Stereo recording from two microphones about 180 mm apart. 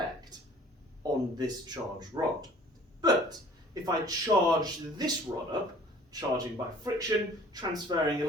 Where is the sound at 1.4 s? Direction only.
20° right (ahead or behind).